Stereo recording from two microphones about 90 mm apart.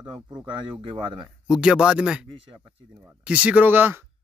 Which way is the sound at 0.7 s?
75° right (ahead or behind).